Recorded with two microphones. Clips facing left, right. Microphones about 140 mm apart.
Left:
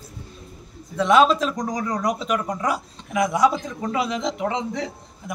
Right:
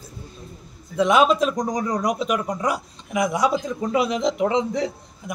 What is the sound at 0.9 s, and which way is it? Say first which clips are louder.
A man's voice: even; 15° right (ahead or behind).